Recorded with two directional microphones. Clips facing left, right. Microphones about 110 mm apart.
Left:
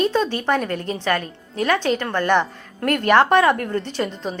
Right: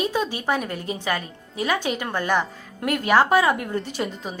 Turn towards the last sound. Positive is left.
turn(degrees=-10)  # may be behind; listen again after turning